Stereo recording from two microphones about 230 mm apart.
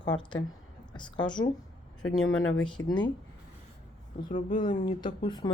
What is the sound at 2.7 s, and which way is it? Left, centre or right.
Speech, centre.